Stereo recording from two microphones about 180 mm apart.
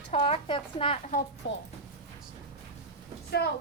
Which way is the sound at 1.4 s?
85° left.